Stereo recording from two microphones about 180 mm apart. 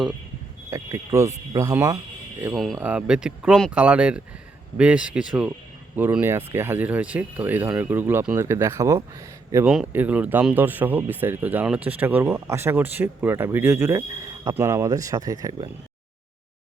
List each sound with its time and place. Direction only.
0.7 s speech: 15° right (ahead or behind)
2.4 s speech: centre (ahead or behind); by 9.0 s 15° right (ahead or behind)
9.6 s speech: 5° right (ahead or behind)